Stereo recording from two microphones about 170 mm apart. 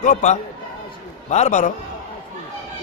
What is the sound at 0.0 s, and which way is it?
A man's voice, 45° left (ahead or behind).